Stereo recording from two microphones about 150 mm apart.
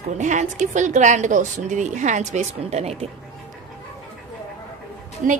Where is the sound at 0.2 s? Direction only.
55° right (ahead or behind).